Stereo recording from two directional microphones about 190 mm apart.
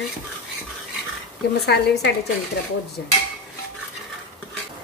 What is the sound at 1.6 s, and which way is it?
A woman's voice, 60° left (ahead or behind).